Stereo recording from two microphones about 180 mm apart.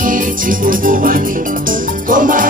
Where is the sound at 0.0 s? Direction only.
50° right (ahead or behind).